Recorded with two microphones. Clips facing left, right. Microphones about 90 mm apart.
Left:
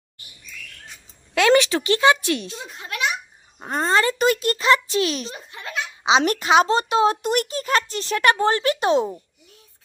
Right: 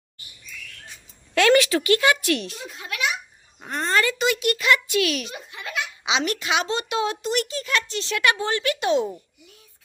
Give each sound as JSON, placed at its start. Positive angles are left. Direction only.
{"t": 1.4, "sound": "a child's voice", "side_deg": 20}
{"t": 7.2, "sound": "a child's voice", "side_deg": 45}